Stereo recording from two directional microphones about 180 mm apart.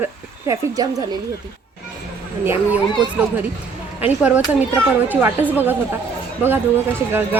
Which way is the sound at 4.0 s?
10° right (ahead or behind).